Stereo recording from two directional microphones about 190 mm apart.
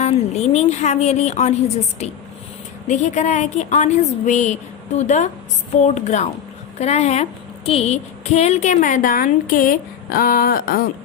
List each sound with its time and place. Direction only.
0.0 s a woman's voice: 35° left (ahead or behind); by 10.8 s 50° left (ahead or behind)